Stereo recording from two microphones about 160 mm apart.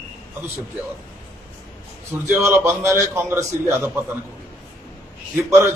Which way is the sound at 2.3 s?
15° right (ahead or behind).